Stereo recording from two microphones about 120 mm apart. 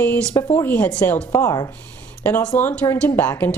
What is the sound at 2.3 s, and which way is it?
A woman's voice, 15° left (ahead or behind).